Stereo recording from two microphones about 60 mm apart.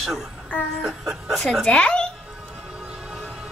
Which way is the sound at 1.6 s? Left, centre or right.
Centre.